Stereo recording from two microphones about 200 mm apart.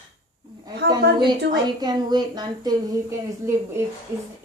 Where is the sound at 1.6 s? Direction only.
20° right (ahead or behind).